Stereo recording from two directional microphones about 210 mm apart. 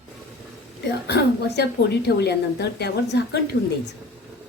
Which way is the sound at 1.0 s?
50° left (ahead or behind).